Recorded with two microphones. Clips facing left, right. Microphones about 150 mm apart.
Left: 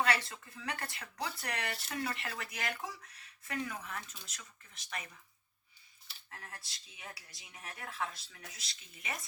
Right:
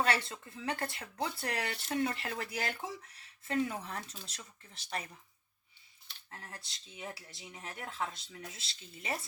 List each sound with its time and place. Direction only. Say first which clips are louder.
0.0 s speech: right 1 dB; 25° right (ahead or behind)
6.3 s speech: right 2 dB; 30° right (ahead or behind)